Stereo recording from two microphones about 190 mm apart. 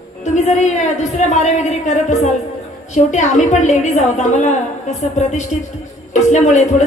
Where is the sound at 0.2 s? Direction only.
40° left (ahead or behind).